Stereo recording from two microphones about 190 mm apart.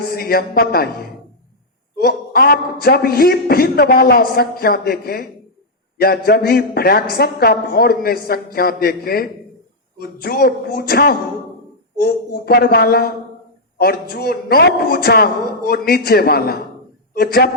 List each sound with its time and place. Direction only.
0.0 s a woman's voice: 55° left (ahead or behind)
2.0 s a woman's voice: 55° left (ahead or behind)